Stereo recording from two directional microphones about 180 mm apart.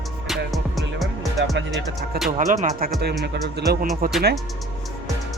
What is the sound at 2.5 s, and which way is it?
Speech, 50° right (ahead or behind).